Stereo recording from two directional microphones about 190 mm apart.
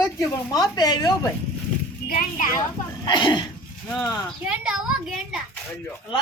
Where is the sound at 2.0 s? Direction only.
50° left (ahead or behind).